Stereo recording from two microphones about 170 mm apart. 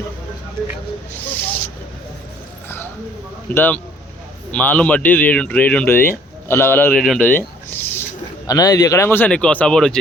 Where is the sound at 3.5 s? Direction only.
10° left (ahead or behind).